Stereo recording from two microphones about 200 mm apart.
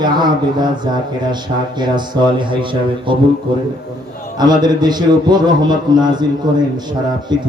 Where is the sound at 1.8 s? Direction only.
20° right (ahead or behind).